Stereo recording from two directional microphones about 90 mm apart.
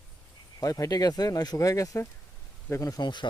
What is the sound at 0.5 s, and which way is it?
Speech, 40° left (ahead or behind).